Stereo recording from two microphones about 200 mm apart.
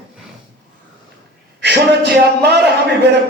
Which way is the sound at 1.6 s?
55° right (ahead or behind).